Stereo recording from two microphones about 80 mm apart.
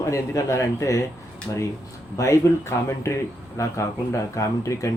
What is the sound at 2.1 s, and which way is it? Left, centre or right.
Speech, left.